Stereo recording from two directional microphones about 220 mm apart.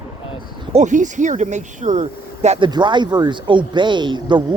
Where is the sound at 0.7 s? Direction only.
35° right (ahead or behind).